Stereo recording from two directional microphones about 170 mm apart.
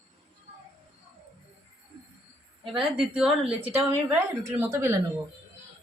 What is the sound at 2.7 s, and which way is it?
A woman's voice, 5° right (ahead or behind).